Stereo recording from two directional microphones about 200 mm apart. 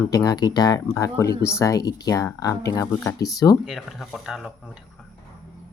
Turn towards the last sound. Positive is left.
turn(degrees=0)  # may be behind; listen again after turning